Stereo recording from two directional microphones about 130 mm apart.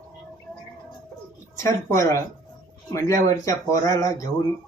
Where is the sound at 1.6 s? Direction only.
25° left (ahead or behind).